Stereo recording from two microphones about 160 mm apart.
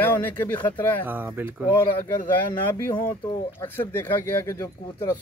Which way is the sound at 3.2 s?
15° left (ahead or behind).